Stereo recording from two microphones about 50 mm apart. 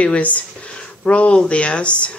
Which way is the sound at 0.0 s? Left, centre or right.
Left.